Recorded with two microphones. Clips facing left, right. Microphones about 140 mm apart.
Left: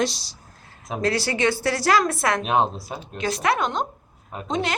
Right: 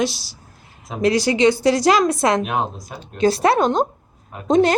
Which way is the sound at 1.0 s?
15° right (ahead or behind).